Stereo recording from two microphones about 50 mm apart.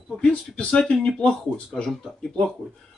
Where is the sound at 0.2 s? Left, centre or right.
Left.